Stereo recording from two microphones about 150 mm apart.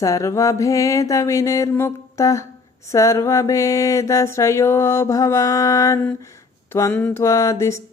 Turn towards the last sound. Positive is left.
turn(degrees=20)  # may be behind; listen again after turning